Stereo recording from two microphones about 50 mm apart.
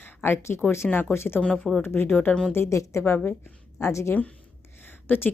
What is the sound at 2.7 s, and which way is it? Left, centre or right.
A woman's voice, left.